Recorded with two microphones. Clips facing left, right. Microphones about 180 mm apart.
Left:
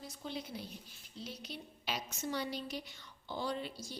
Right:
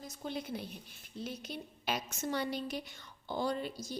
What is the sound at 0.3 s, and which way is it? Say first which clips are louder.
A woman's voice: right 4 dB; 55° right (ahead or behind).